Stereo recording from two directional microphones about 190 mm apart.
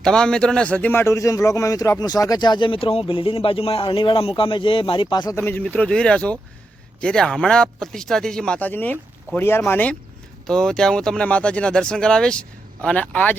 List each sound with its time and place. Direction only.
0.0 s a man's voice: 5° left (ahead or behind)